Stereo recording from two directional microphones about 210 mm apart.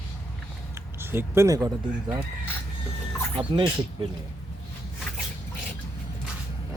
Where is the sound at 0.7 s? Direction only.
10° right (ahead or behind).